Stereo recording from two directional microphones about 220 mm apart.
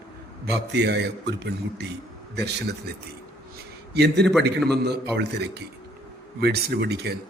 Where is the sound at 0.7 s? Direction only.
50° right (ahead or behind).